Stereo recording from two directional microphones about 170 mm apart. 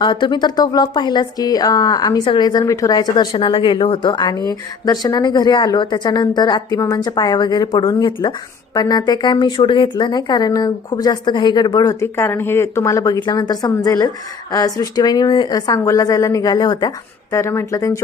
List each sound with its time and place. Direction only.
0.0 s speech: 25° left (ahead or behind)